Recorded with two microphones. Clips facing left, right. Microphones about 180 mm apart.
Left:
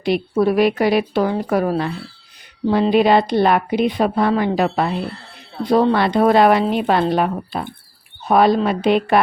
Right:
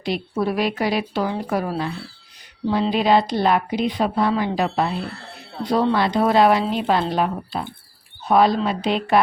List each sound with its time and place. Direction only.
0.0 s speech: 55° left (ahead or behind)